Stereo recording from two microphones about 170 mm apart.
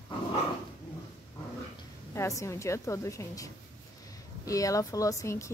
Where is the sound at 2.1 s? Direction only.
15° left (ahead or behind).